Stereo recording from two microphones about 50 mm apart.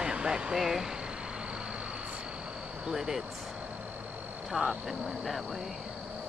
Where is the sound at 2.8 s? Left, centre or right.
Centre.